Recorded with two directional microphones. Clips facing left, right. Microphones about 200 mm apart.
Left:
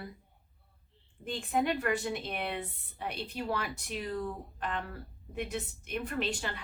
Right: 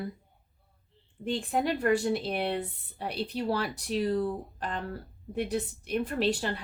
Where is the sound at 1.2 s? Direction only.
35° right (ahead or behind).